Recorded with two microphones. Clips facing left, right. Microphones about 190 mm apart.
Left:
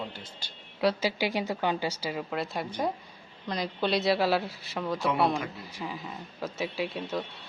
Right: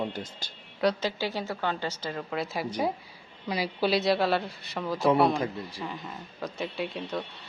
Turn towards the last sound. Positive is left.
turn(degrees=0)  # may be behind; listen again after turning